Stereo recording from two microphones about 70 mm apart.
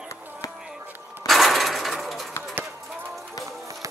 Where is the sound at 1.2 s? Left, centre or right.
Centre.